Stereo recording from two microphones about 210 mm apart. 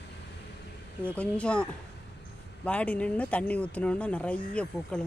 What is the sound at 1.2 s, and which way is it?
Speech, 5° left (ahead or behind).